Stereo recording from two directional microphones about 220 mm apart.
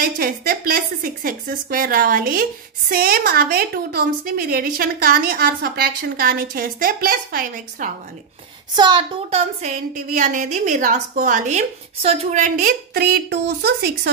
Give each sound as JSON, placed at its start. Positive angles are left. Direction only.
{"t": 0.0, "sound": "a woman's voice", "side_deg": -40}
{"t": 8.7, "sound": "a woman's voice", "side_deg": -20}